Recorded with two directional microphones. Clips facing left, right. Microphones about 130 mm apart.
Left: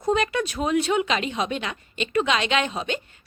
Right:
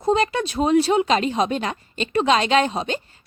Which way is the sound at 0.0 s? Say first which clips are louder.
Right 3 dB; 30° right (ahead or behind).